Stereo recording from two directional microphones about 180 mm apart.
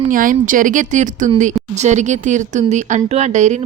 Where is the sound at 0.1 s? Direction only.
50° right (ahead or behind).